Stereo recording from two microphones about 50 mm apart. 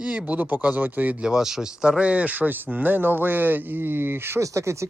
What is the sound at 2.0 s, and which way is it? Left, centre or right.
Speech, right.